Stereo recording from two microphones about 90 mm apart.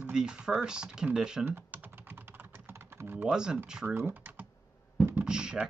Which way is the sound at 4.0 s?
25° right (ahead or behind).